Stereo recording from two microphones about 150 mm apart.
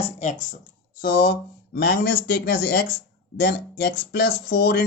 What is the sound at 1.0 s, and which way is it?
Speech, 80° left.